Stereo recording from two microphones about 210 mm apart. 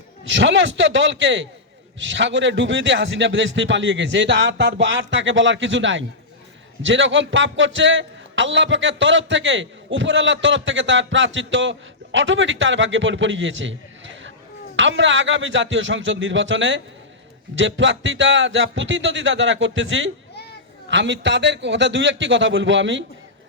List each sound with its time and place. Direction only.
0.3 s a man's voice: 60° right (ahead or behind)